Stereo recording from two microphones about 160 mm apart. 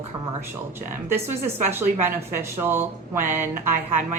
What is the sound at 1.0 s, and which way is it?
Speech, 15° right (ahead or behind).